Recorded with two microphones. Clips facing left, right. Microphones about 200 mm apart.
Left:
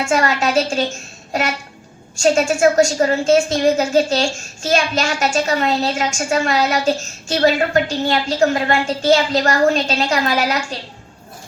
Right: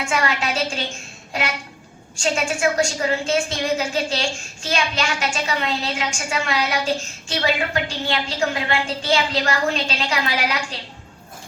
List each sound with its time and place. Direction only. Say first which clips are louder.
0.0 s a woman's voice: left 6 dB; 45° left (ahead or behind)